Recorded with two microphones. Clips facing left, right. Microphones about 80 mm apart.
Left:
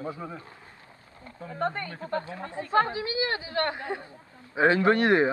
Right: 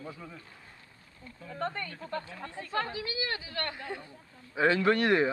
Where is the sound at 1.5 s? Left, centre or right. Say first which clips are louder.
Left 5 dB; centre.